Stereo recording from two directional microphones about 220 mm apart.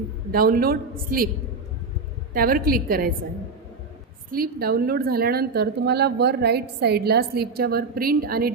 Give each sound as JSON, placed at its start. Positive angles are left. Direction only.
{"t": 0.3, "sound": "a woman's voice", "side_deg": -40}
{"t": 2.3, "sound": "a woman's voice", "side_deg": -40}
{"t": 4.3, "sound": "a woman's voice", "side_deg": -45}